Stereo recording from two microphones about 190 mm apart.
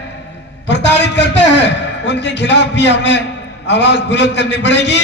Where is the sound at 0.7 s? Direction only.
70° left (ahead or behind).